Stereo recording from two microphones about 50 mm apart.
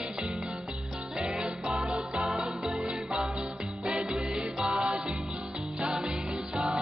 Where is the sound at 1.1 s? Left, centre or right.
Centre.